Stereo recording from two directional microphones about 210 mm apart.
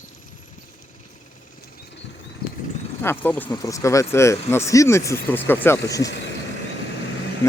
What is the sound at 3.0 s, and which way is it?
Speech, 10° left (ahead or behind).